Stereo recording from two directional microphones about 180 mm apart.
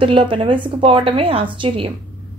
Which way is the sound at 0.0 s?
30° right (ahead or behind).